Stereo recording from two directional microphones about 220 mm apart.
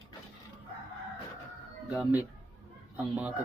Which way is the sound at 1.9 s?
5° right (ahead or behind).